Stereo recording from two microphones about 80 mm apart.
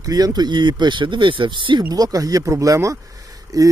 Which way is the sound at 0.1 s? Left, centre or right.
Right.